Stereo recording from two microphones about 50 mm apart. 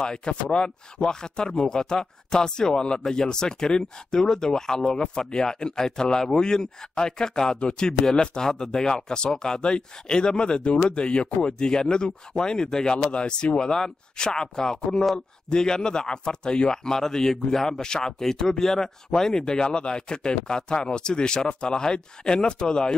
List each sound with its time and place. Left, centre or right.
0.0 s speech: centre